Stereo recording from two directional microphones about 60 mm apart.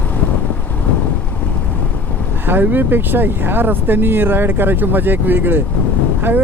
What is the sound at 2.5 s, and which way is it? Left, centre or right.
Speech, right.